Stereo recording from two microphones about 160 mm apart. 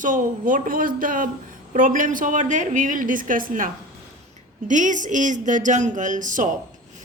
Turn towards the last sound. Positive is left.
turn(degrees=-55)  # may be behind; listen again after turning